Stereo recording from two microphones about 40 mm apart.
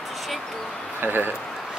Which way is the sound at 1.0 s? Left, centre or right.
Right.